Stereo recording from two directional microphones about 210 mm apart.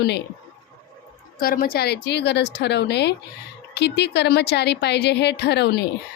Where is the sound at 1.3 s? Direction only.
45° left (ahead or behind).